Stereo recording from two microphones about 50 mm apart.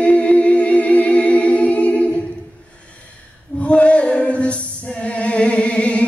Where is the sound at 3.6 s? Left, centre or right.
Left.